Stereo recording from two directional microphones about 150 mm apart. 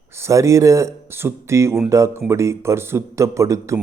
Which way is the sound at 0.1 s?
20° right (ahead or behind).